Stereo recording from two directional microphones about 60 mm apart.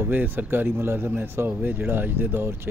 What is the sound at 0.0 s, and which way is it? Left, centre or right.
Speech, right.